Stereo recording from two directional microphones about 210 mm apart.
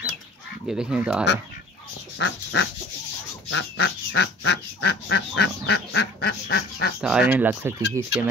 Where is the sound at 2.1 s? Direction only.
60° left (ahead or behind).